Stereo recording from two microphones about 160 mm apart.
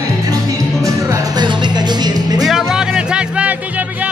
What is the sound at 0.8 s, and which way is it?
Music, 20° right (ahead or behind).